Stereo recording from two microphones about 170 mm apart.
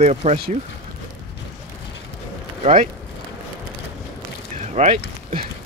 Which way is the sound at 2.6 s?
50° right (ahead or behind).